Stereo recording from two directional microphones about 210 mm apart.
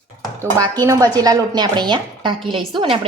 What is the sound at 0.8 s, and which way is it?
A woman's voice, 15° right (ahead or behind).